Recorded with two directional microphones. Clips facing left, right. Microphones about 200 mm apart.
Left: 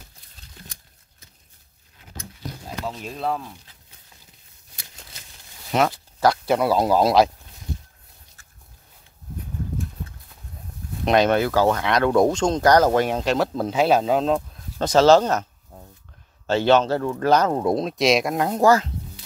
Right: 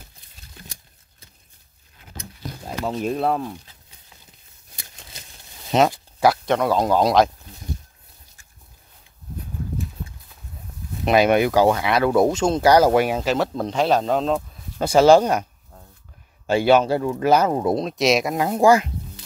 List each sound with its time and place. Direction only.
2.8 s speech: 55° right (ahead or behind)
5.7 s a sound: 20° right (ahead or behind)
6.4 s speech: 10° left (ahead or behind)
11.1 s speech: 10° right (ahead or behind)
16.4 s speech: 10° right (ahead or behind)